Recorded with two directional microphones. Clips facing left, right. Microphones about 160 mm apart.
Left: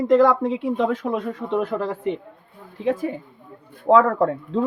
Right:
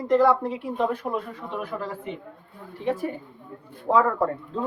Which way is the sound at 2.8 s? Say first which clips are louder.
Left 4 dB; 90° left.